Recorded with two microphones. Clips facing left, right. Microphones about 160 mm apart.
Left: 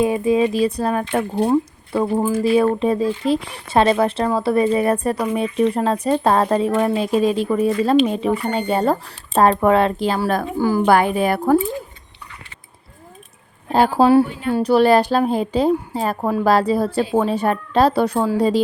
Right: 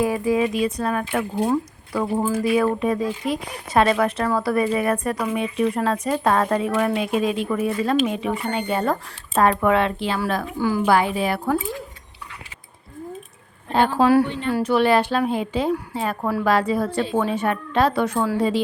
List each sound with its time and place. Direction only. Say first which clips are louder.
0.0 s a woman's voice: left 3 dB; 25° left (ahead or behind); by 11.5 s 50° left (ahead or behind)
13.9 s speech: left 3 dB; 30° left (ahead or behind)